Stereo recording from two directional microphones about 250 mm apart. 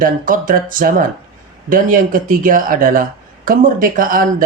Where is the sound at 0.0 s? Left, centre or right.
Right.